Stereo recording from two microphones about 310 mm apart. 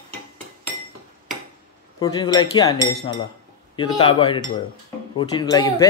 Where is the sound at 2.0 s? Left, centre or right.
Centre.